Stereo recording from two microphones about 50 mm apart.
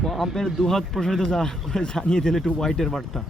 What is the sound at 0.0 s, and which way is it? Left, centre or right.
Speech, centre.